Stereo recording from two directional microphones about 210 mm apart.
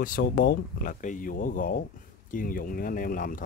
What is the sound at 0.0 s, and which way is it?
Speech, 40° left (ahead or behind).